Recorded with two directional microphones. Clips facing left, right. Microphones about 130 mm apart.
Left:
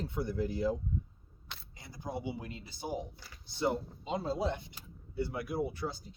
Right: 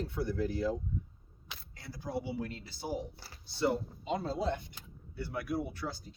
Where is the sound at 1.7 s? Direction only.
20° left (ahead or behind).